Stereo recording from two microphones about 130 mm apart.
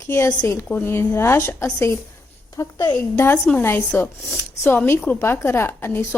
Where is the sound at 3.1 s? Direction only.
15° left (ahead or behind).